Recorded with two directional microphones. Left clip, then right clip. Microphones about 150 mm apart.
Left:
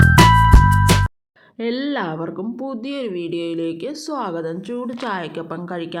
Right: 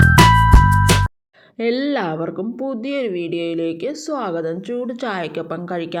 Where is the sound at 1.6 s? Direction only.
30° right (ahead or behind).